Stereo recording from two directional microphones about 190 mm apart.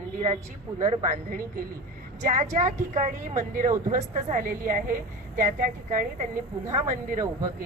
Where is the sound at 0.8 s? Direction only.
40° right (ahead or behind).